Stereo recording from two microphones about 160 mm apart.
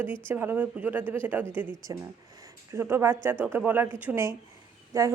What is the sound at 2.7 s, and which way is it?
Speech, 15° right (ahead or behind).